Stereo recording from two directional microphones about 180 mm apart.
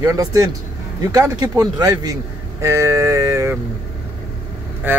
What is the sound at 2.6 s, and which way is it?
Vehicle, 15° right (ahead or behind).